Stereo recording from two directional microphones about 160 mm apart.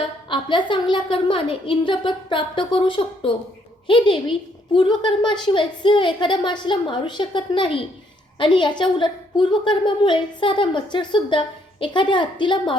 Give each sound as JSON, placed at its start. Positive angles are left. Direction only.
{"t": 0.3, "sound": "a woman's voice", "side_deg": 30}